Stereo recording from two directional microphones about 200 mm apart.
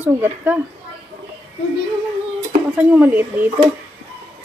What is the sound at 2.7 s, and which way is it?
Speech, 5° right (ahead or behind).